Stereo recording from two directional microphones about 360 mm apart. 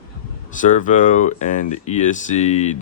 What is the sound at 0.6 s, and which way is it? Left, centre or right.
Speech, left.